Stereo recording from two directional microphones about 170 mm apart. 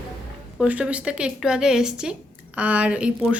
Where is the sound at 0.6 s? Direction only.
10° right (ahead or behind).